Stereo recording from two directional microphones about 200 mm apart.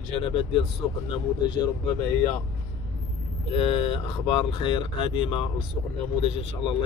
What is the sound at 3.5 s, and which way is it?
Speech, 30° left (ahead or behind).